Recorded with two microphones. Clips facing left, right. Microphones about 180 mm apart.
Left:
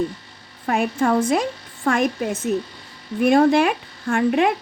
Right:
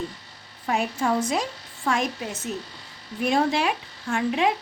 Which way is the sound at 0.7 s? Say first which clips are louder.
Left 5 dB; 55° left (ahead or behind).